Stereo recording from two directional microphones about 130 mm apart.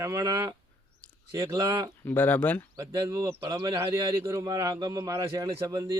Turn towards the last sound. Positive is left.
turn(degrees=-25)  # may be behind; listen again after turning